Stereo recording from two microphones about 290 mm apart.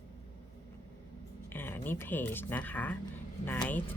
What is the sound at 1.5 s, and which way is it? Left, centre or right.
Speech, centre.